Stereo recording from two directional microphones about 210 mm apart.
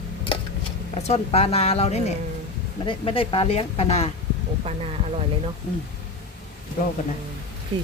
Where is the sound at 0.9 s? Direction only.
30° left (ahead or behind).